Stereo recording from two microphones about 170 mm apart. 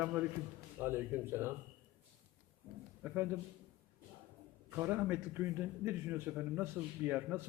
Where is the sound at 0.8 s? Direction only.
15° right (ahead or behind).